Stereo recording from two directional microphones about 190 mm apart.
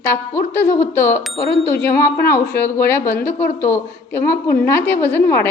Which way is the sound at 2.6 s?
15° left (ahead or behind).